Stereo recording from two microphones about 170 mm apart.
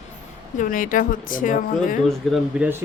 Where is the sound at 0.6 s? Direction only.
50° left (ahead or behind).